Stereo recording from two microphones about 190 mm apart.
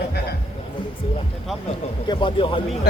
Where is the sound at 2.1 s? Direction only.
25° left (ahead or behind).